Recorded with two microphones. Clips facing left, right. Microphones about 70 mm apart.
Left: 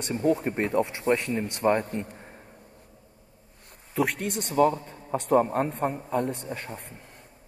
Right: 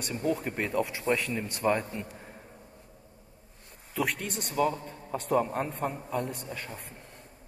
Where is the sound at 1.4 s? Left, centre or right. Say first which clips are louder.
Left 4 dB; left.